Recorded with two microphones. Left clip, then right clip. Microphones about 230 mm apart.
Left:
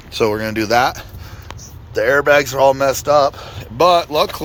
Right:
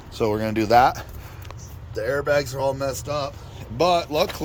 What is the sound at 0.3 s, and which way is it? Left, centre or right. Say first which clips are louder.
Speech: even; centre.